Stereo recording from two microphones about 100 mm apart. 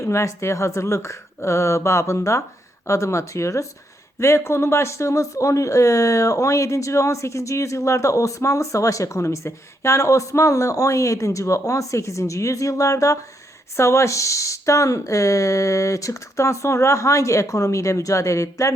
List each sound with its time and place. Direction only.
0.0 s speech: 30° left (ahead or behind)